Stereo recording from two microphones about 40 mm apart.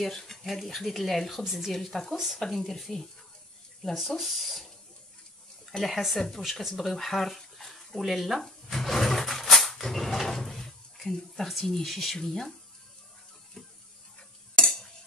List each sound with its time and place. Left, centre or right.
0.0 s speech: centre
1.8 s speech: centre
2.1 s speech: centre
5.7 s speech: centre
6.1 s speech: centre
6.4 s speech: centre
6.7 s a sound: centre
11.6 s speech: centre
14.5 s cutlery: centre